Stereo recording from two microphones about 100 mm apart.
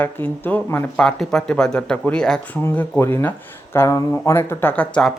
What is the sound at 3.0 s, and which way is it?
Speech, 20° left (ahead or behind).